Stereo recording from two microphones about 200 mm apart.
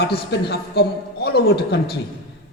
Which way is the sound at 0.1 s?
55° left (ahead or behind).